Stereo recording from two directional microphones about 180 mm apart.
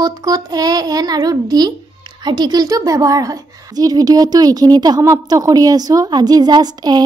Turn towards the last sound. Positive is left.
turn(degrees=-20)  # may be behind; listen again after turning